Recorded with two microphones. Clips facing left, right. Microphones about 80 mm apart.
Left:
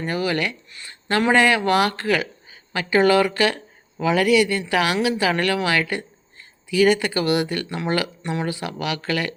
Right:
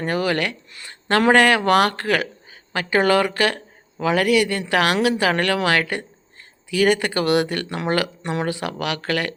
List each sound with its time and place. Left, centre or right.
0.0 s speech: right
1.0 s speech: right